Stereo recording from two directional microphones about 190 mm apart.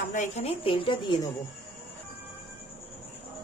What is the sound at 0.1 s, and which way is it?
Speech, 35° left (ahead or behind).